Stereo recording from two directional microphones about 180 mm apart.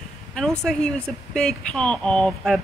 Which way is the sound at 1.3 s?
5° left (ahead or behind).